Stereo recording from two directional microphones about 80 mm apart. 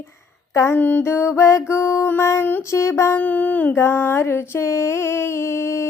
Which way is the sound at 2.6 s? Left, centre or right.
Left.